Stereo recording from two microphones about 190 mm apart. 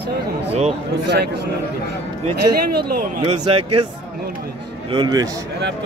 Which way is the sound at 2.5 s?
55° right (ahead or behind).